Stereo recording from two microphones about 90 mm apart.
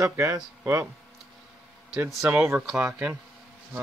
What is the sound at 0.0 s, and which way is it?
Speech, 35° right (ahead or behind).